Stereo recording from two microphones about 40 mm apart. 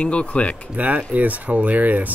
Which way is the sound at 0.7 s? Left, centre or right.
Right.